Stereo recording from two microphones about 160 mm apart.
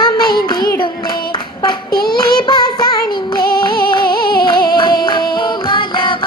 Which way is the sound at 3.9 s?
30° left (ahead or behind).